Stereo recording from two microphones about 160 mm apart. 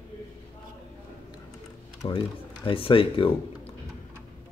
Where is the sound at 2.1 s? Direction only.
30° left (ahead or behind).